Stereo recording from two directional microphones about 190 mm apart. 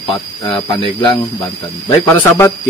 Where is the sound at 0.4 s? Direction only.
20° left (ahead or behind).